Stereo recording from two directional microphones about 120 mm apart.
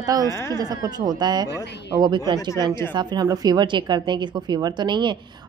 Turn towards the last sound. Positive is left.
turn(degrees=-40)  # may be behind; listen again after turning